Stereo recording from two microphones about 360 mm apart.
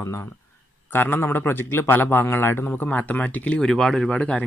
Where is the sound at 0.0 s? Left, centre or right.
Centre.